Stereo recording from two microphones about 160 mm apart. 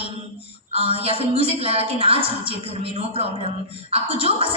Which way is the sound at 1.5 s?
35° right (ahead or behind).